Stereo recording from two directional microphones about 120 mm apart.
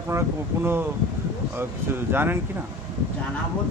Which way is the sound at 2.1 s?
15° right (ahead or behind).